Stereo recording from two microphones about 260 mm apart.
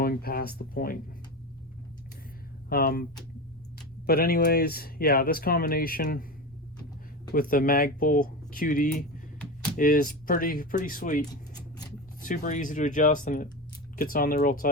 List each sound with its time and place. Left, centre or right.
0.0 s speech: left
2.6 s speech: left
7.3 s speech: left